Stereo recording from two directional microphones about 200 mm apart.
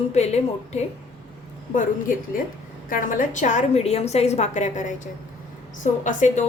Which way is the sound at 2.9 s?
40° left (ahead or behind).